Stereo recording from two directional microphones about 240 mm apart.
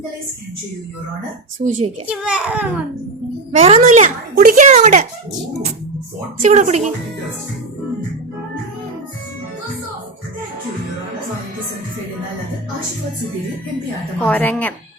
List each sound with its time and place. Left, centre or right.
1.5 s a child's voice: right
2.0 s a child's voice: centre
3.6 s a child's voice: right
6.4 s speech: right
14.2 s a woman's voice: centre